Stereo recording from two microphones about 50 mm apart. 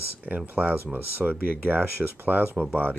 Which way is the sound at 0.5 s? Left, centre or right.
Right.